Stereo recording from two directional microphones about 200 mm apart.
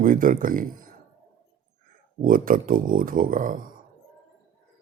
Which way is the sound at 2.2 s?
45° right (ahead or behind).